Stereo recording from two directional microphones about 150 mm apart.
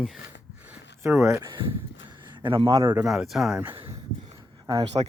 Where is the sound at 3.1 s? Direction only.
Centre (ahead or behind).